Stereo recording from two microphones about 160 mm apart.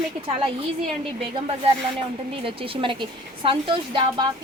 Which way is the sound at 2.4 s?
35° right (ahead or behind).